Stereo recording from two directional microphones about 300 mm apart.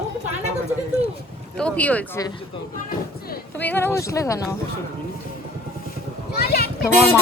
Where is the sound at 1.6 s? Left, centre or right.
Centre.